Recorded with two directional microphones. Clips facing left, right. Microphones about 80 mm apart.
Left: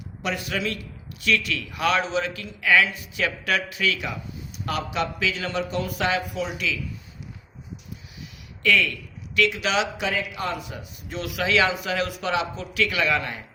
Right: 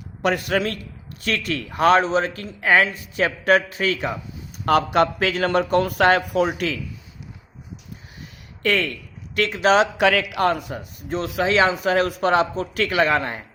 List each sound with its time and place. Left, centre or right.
0.2 s a man's voice: right
4.6 s a man's voice: right
8.6 s a man's voice: right
10.0 s speech: right
10.5 s speech: right